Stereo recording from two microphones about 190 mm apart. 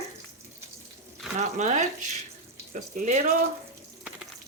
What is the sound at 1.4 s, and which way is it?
Speech, 40° right (ahead or behind).